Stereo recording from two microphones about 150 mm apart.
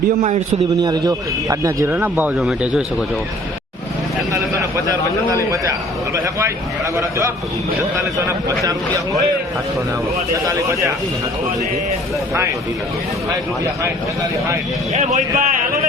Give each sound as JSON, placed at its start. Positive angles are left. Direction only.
{"t": 0.2, "sound": "a man's voice", "side_deg": -45}
{"t": 0.8, "sound": "speech", "side_deg": -25}
{"t": 2.4, "sound": "a man's voice", "side_deg": 0}
{"t": 4.9, "sound": "speech", "side_deg": -20}
{"t": 7.9, "sound": "speech", "side_deg": -20}
{"t": 10.5, "sound": "speech", "side_deg": -20}
{"t": 14.9, "sound": "speech", "side_deg": -55}